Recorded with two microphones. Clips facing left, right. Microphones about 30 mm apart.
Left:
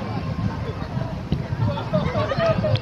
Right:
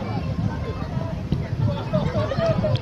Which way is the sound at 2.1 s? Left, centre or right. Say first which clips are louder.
Left 2 dB; left.